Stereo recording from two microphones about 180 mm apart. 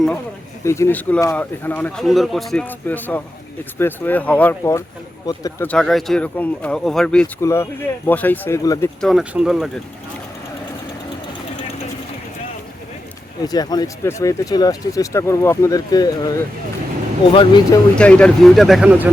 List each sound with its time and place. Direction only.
0.6 s speech: 15° left (ahead or behind)
5.6 s speech: 5° left (ahead or behind)
9.0 s speech: centre (ahead or behind)
13.4 s speech: 20° left (ahead or behind)
17.3 s speech: 25° left (ahead or behind)
17.9 s speech: 5° left (ahead or behind)